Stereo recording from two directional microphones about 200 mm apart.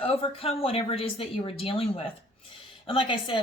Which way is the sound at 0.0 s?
30° left (ahead or behind).